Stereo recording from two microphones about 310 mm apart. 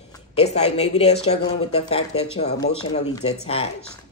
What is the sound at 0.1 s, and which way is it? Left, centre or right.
Speech, centre.